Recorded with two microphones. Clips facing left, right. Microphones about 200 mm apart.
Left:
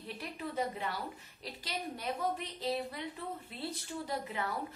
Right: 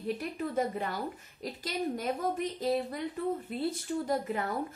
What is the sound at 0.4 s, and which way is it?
A woman's voice, 45° right (ahead or behind).